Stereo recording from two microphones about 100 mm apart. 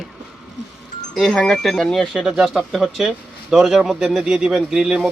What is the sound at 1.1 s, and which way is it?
Speech, 5° left (ahead or behind).